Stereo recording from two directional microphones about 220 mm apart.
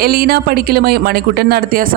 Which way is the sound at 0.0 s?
45° right (ahead or behind).